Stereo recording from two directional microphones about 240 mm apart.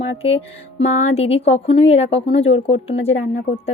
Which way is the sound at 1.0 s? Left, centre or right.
Left.